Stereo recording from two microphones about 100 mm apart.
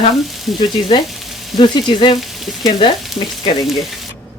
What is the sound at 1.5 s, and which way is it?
Frying, 50° left (ahead or behind).